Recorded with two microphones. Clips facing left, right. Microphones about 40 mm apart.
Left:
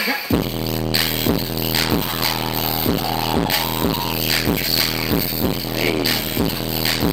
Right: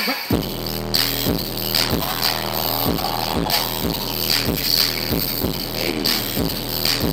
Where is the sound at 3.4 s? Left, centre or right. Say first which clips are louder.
Left 2 dB; left.